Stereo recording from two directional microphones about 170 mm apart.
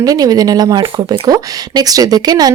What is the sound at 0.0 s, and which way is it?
Speech, 20° right (ahead or behind).